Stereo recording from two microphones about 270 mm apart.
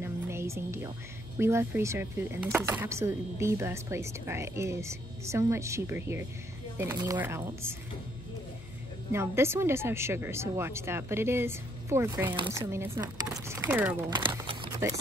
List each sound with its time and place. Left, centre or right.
0.0 s music: centre
1.4 s speech: centre
9.1 s speech: centre